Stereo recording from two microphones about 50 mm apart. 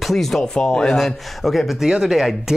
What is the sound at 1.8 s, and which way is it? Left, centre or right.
Speech, centre.